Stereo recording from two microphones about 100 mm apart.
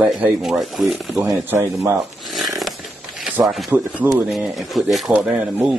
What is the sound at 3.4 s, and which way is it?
Speech, centre (ahead or behind).